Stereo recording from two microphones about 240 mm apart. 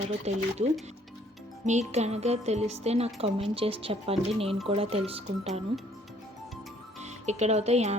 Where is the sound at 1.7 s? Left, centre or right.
Right.